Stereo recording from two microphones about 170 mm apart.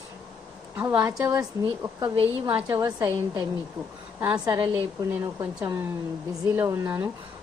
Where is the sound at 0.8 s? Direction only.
10° right (ahead or behind).